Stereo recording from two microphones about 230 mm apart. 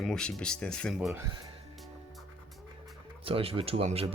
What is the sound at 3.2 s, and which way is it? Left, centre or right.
Speech, right.